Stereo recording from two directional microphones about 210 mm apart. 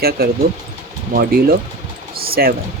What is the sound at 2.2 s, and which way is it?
Speech, 45° right (ahead or behind).